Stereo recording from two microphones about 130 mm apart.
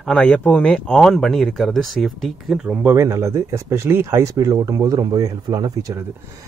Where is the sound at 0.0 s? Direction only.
5° left (ahead or behind).